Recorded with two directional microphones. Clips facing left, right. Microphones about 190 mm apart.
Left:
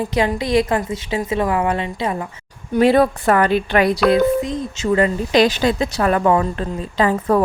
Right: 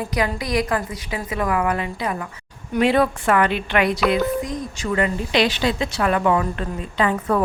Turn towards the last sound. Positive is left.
turn(degrees=35)  # may be behind; listen again after turning